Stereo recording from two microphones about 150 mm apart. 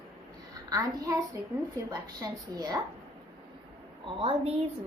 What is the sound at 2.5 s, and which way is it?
Speech, 25° right (ahead or behind).